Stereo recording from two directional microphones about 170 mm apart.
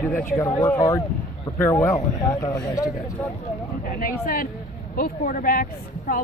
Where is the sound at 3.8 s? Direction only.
55° left (ahead or behind).